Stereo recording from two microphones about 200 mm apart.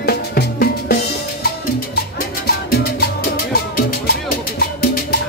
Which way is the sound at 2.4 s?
50° left (ahead or behind).